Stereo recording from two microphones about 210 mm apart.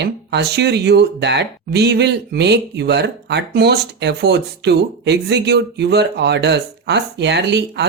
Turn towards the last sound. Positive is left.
turn(degrees=-55)  # may be behind; listen again after turning